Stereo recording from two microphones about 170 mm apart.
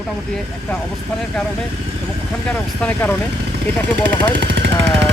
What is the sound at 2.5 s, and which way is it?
Speech, 10° left (ahead or behind).